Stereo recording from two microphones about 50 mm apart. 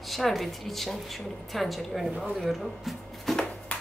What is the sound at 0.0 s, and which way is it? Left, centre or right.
Speech, centre.